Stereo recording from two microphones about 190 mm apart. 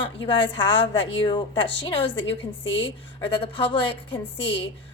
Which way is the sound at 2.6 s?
75° left (ahead or behind).